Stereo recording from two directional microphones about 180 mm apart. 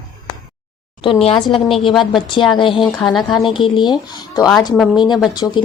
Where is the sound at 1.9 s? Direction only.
Centre (ahead or behind).